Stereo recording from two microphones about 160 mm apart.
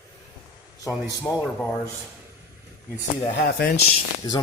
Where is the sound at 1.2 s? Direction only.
10° left (ahead or behind).